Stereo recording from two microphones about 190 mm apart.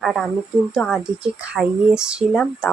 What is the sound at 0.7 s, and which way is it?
Speech, centre (ahead or behind).